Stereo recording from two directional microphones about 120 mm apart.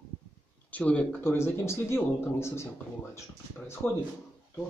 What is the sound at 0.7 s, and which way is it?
Speech, 10° left (ahead or behind).